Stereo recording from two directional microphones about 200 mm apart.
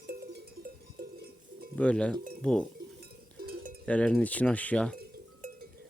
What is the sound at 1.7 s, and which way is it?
Speech, 5° left (ahead or behind).